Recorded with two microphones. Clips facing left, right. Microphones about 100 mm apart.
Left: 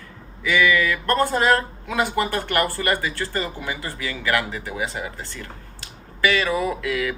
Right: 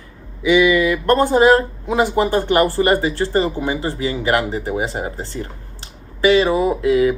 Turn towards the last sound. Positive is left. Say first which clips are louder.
# right 9 dB
turn(degrees=-25)  # may be behind; listen again after turning